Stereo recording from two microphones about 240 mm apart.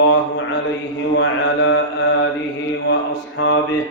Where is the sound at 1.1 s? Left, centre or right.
Left.